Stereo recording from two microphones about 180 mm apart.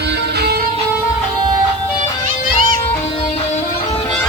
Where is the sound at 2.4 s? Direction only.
50° right (ahead or behind).